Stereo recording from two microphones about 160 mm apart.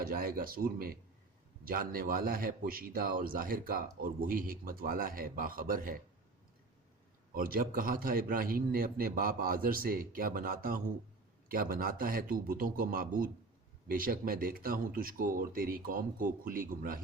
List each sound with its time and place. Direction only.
0.0 s a man's voice: 65° right (ahead or behind)
7.3 s a man's voice: 65° right (ahead or behind)